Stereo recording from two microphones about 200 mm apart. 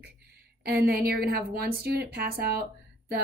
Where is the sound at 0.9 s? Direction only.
50° right (ahead or behind).